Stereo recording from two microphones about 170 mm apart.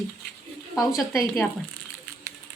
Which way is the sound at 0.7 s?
Centre (ahead or behind).